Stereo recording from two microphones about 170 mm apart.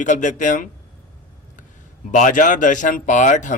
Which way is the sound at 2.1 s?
50° left (ahead or behind).